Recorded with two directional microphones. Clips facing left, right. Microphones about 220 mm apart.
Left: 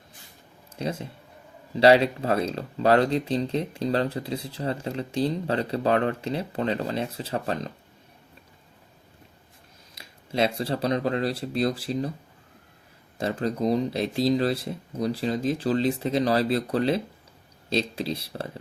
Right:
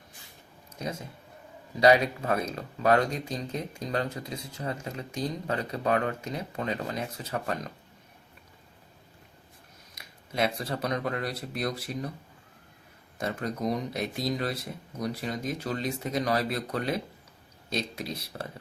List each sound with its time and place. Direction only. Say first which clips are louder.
0.8 s speech: left 5 dB; 30° left (ahead or behind)
9.9 s speech: left 6 dB; 25° left (ahead or behind)
13.1 s speech: left 5 dB; 30° left (ahead or behind)